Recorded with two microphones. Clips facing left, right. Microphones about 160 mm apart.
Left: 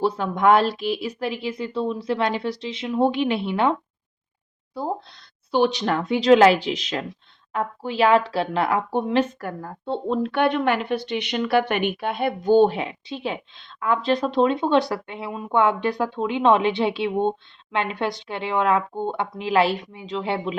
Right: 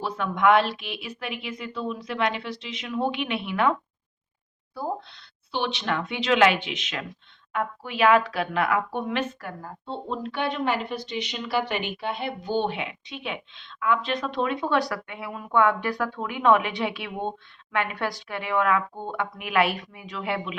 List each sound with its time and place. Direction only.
0.0 s speech: 35° left (ahead or behind)
4.9 s speech: 40° left (ahead or behind)
9.4 s a woman's voice: 45° left (ahead or behind)
10.3 s speech: 55° left (ahead or behind); by 20.6 s 30° left (ahead or behind)